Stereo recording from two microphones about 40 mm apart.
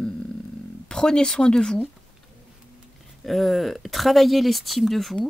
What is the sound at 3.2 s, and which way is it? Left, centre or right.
Speech, centre.